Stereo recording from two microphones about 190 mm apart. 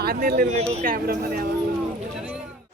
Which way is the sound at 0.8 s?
45° right (ahead or behind).